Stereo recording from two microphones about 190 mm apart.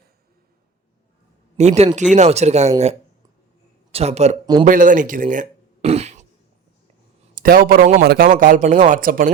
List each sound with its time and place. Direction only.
1.5 s speech: 35° right (ahead or behind)
3.9 s speech: 35° right (ahead or behind)
4.6 s a sound: 45° right (ahead or behind)
7.3 s speech: 45° right (ahead or behind)